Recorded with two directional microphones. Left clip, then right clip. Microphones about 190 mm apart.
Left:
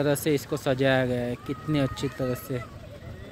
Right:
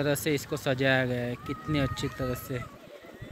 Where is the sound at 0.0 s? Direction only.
10° left (ahead or behind).